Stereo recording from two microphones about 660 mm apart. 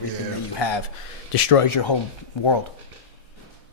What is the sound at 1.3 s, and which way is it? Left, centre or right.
Speech, left.